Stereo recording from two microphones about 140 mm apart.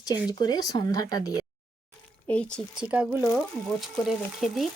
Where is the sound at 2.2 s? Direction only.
10° left (ahead or behind).